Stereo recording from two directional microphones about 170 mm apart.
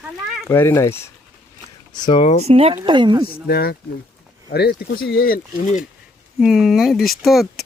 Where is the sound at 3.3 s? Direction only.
65° left (ahead or behind); by 5.8 s 50° left (ahead or behind).